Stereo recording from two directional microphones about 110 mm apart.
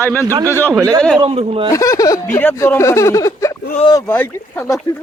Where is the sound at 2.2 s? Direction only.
15° left (ahead or behind).